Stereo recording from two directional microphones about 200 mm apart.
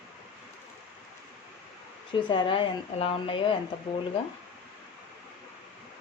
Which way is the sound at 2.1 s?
25° left (ahead or behind).